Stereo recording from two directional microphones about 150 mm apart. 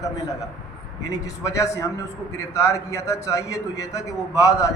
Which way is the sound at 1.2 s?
20° left (ahead or behind).